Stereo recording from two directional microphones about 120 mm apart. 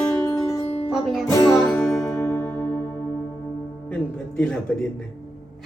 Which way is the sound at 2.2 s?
15° left (ahead or behind).